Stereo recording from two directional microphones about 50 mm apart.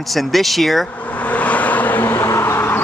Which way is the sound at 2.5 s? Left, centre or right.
Left.